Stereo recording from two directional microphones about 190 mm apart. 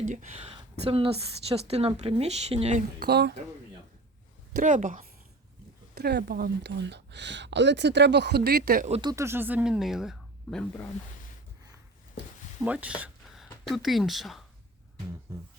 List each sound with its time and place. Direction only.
0.0 s a woman's voice: 40° right (ahead or behind)
3.0 s speech: 60° right (ahead or behind)
4.5 s speech: 40° right (ahead or behind)
5.9 s speech: 60° right (ahead or behind)
8.9 s speech: 25° right (ahead or behind); by 10.8 s 5° left (ahead or behind)
12.2 s a sound: 65° left (ahead or behind)
12.6 s speech: 5° right (ahead or behind)